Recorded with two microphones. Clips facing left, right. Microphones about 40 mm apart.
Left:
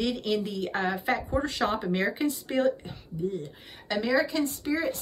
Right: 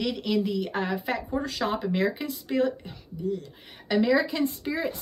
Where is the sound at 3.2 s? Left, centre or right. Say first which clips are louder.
Right 1 dB; left.